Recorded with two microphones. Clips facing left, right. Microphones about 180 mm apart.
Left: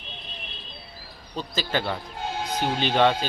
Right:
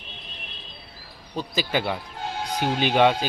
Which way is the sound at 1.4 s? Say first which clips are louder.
Right 2 dB; 15° right (ahead or behind).